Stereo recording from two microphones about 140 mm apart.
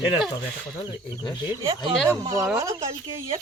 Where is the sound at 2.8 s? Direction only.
45° right (ahead or behind).